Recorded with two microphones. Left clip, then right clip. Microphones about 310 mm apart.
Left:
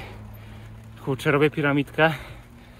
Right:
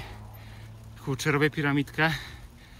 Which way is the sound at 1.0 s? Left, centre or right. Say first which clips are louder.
Left 5 dB; centre.